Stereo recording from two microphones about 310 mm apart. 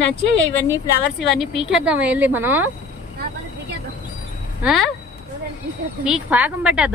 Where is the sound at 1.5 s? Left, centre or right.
Centre.